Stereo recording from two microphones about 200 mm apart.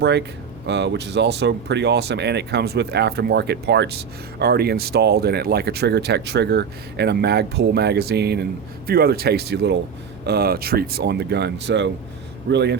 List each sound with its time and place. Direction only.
0.0 s speech: 60° right (ahead or behind)